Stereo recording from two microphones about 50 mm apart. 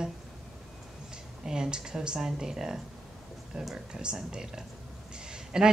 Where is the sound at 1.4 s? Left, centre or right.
Centre.